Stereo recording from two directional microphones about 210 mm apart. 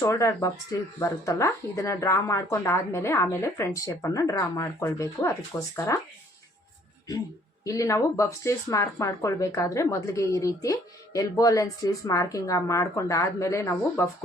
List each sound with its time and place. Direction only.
0.0 s speech: 15° left (ahead or behind)
7.6 s speech: 15° left (ahead or behind)